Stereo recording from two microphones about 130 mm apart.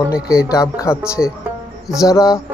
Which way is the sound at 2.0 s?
25° left (ahead or behind).